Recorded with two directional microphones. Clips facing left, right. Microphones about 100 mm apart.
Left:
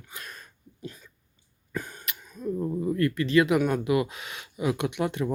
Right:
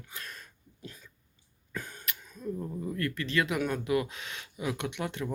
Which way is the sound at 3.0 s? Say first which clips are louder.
Left 8 dB; 15° left (ahead or behind).